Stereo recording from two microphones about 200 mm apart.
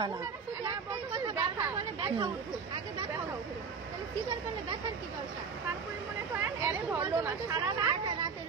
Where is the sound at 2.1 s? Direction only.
20° right (ahead or behind).